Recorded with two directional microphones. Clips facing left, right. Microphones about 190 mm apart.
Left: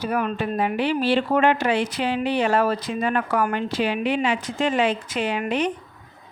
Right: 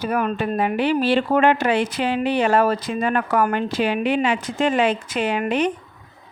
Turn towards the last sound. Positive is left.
turn(degrees=-55)  # may be behind; listen again after turning